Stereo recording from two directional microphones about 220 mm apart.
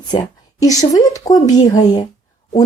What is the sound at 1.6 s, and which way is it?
Speech, 35° left (ahead or behind).